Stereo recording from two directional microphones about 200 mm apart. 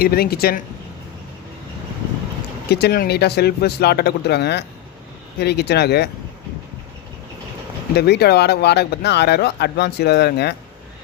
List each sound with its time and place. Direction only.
0.0 s speech: 50° left (ahead or behind)
2.7 s speech: 50° left (ahead or behind)
7.9 s speech: 55° left (ahead or behind)